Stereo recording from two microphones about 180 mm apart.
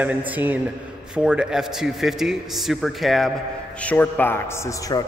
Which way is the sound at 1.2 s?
5° right (ahead or behind).